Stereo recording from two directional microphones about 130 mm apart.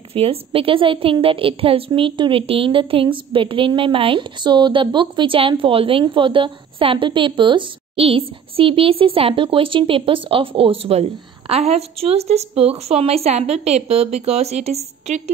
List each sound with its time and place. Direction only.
0.1 s a woman's voice: 45° right (ahead or behind)